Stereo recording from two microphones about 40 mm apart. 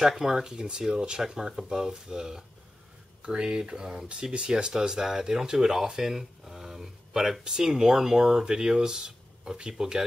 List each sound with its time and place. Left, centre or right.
0.0 s speech: centre